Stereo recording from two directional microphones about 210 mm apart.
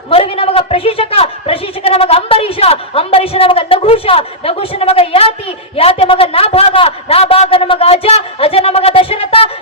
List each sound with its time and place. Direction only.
0.1 s a woman's voice: 25° left (ahead or behind)